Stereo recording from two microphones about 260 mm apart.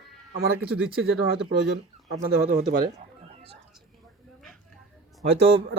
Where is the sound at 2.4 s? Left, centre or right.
Right.